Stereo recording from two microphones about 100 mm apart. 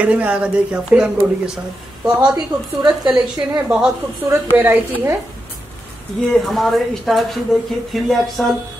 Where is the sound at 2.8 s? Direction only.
5° right (ahead or behind).